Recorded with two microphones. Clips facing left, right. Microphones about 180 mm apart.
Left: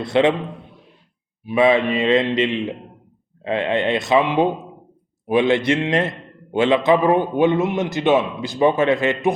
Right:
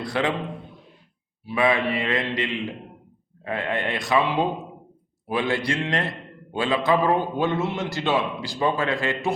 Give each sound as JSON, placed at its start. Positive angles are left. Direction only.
{"t": 0.0, "sound": "a man's voice", "side_deg": 25}
{"t": 1.5, "sound": "a man's voice", "side_deg": 20}